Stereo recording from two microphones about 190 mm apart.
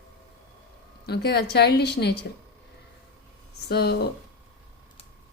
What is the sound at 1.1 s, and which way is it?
Speech, 60° left (ahead or behind).